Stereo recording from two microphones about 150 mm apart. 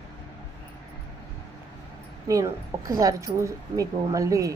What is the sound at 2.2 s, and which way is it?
A woman's voice, 20° right (ahead or behind).